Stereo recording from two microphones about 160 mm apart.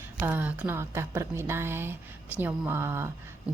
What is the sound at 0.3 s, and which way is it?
Speech, 10° right (ahead or behind).